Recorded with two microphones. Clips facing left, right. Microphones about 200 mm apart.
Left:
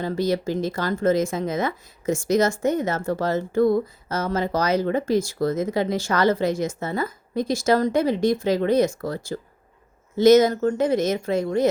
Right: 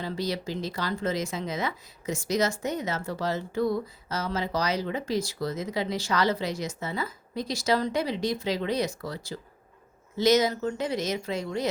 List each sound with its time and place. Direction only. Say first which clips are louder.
0.0 s speech: left 8 dB; 50° left (ahead or behind)